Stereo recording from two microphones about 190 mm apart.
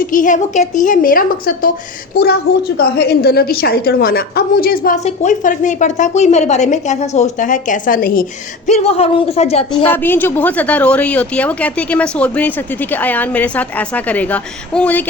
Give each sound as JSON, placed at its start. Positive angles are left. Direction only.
{"t": 0.0, "sound": "a woman's voice", "side_deg": 45}
{"t": 5.0, "sound": "a woman's voice", "side_deg": 40}
{"t": 8.6, "sound": "a woman's voice", "side_deg": 35}
{"t": 9.7, "sound": "speech", "side_deg": 10}